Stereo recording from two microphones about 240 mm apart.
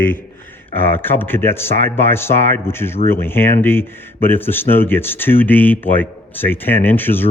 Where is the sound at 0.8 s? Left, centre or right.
Centre.